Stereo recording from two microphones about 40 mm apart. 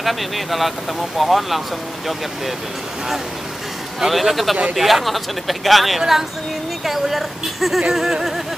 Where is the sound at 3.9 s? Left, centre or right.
Centre.